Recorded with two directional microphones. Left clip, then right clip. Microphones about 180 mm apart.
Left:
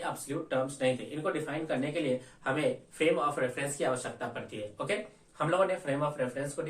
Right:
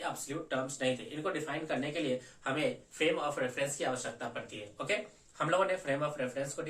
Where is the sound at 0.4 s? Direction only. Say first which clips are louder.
Left 4 dB; 15° right (ahead or behind).